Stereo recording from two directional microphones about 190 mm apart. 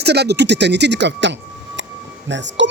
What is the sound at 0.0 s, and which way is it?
Speech, 60° right (ahead or behind).